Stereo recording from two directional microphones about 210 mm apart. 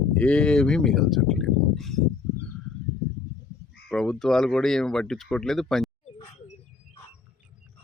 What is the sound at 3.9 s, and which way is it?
Speech, centre (ahead or behind).